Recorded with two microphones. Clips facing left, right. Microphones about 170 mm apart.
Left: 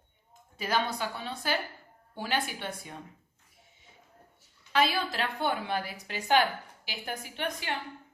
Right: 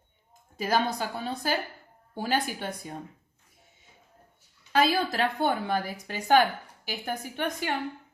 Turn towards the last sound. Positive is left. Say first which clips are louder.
# right 4 dB
turn(degrees=-45)  # may be behind; listen again after turning